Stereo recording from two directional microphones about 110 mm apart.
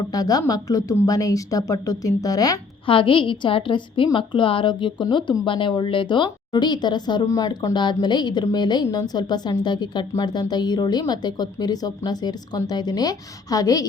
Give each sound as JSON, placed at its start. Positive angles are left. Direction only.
{"t": 0.1, "sound": "a woman's voice", "side_deg": 35}
{"t": 2.8, "sound": "a woman's voice", "side_deg": 50}